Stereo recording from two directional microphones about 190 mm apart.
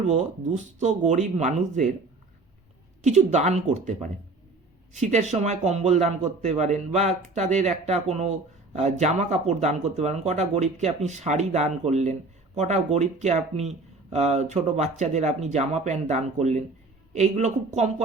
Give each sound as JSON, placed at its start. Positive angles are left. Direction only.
{"t": 0.1, "sound": "speech", "side_deg": -40}
{"t": 3.0, "sound": "speech", "side_deg": -35}